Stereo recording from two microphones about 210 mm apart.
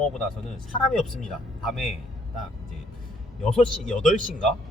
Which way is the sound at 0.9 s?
Centre (ahead or behind).